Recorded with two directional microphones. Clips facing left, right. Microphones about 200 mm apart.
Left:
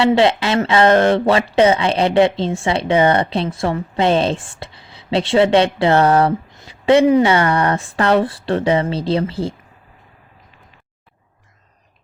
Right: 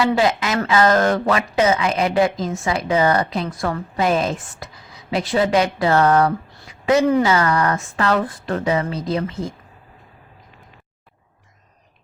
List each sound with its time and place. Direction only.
0.0 s speech: 30° left (ahead or behind)